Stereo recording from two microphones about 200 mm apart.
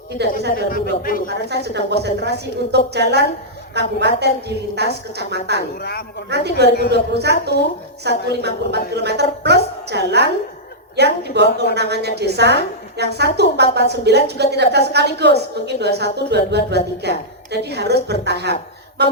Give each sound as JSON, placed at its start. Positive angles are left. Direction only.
{"t": 0.5, "sound": "speech", "side_deg": 45}
{"t": 1.3, "sound": "a woman's voice", "side_deg": -55}
{"t": 5.8, "sound": "speech", "side_deg": 55}
{"t": 6.3, "sound": "a woman's voice", "side_deg": -55}